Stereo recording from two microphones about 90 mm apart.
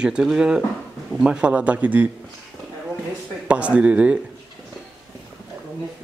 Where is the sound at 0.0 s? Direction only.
10° right (ahead or behind).